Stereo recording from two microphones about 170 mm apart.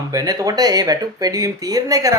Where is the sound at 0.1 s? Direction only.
20° right (ahead or behind).